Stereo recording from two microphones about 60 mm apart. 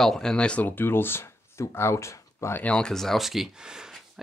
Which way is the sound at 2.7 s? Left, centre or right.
Centre.